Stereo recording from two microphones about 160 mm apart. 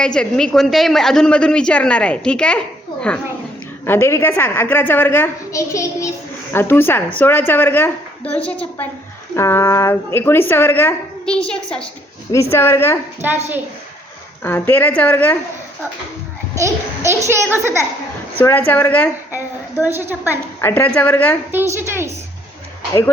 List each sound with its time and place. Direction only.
0.0 s a woman's voice: 5° left (ahead or behind)
9.3 s a woman's voice: 15° left (ahead or behind)
12.3 s a woman's voice: 15° left (ahead or behind)
13.2 s a child's voice: 10° right (ahead or behind)
14.4 s a woman's voice: 15° left (ahead or behind)
16.6 s a child's voice: 20° right (ahead or behind)
18.3 s a woman's voice: 10° left (ahead or behind)
19.8 s a child's voice: 15° right (ahead or behind)
20.6 s a woman's voice: 15° left (ahead or behind)
21.5 s a child's voice: 15° right (ahead or behind)